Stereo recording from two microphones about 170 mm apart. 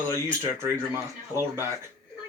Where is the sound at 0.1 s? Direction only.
15° right (ahead or behind).